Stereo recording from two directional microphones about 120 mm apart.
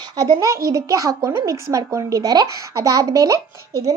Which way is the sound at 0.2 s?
30° right (ahead or behind).